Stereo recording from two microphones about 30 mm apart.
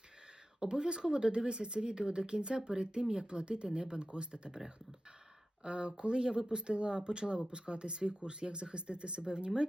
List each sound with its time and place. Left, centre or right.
0.6 s speech: right